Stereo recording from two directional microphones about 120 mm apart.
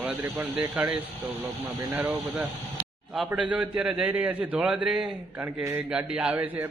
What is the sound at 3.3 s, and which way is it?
A man's voice, 10° right (ahead or behind).